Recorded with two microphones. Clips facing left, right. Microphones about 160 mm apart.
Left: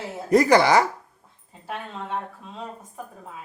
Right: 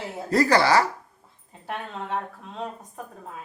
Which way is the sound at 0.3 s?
20° left (ahead or behind).